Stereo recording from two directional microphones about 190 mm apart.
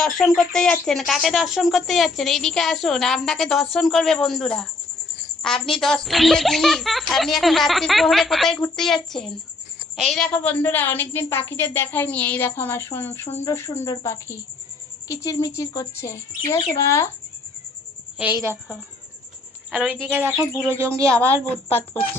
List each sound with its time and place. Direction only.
0.0 s a woman's voice: centre (ahead or behind)
19.7 s a woman's voice: 5° right (ahead or behind)